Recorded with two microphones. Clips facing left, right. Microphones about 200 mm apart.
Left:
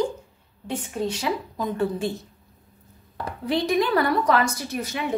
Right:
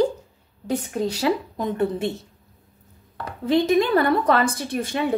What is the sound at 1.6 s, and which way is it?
Speech, 25° right (ahead or behind).